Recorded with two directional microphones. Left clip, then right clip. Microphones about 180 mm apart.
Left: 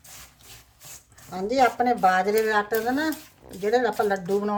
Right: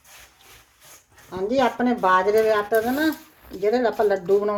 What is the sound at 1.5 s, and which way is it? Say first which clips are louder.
Speech: left 1 dB; 10° right (ahead or behind).